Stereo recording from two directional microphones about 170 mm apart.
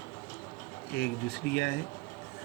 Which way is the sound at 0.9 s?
70° left (ahead or behind).